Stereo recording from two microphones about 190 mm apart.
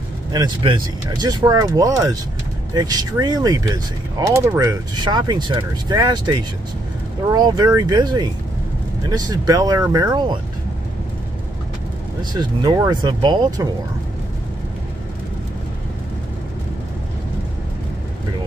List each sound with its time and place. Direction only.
0.3 s speech: 20° right (ahead or behind)
12.2 s speech: 20° right (ahead or behind)